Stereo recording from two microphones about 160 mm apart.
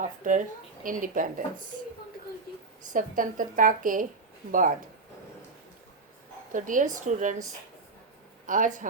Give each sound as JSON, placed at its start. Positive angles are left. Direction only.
{"t": 0.0, "sound": "speech", "side_deg": -50}
{"t": 2.9, "sound": "speech", "side_deg": -55}
{"t": 6.5, "sound": "speech", "side_deg": -55}
{"t": 8.4, "sound": "speech", "side_deg": -55}